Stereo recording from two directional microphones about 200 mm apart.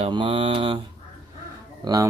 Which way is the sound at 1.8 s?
20° right (ahead or behind).